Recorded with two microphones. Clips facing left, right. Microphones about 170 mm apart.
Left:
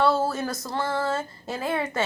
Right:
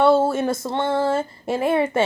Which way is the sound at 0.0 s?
25° right (ahead or behind).